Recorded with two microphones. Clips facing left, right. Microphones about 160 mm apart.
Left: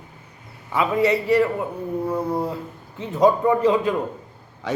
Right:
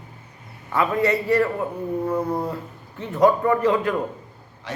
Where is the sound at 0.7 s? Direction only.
15° left (ahead or behind).